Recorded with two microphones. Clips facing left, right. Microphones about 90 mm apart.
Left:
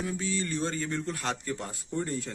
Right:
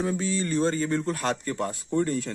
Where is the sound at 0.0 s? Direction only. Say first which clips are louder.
Right 5 dB; 40° right (ahead or behind).